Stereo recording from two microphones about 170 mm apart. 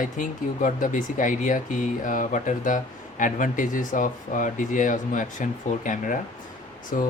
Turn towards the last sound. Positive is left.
turn(degrees=55)  # may be behind; listen again after turning